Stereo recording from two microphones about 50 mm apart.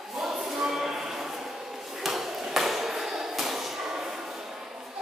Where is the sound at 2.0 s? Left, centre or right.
Centre.